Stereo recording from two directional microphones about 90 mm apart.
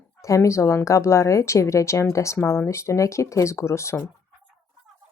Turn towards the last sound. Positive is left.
turn(degrees=30)  # may be behind; listen again after turning